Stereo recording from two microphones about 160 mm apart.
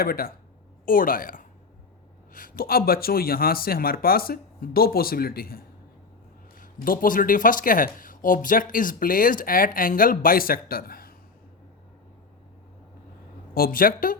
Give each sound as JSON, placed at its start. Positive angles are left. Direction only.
{"t": 0.0, "sound": "speech", "side_deg": 65}
{"t": 13.5, "sound": "speech", "side_deg": 65}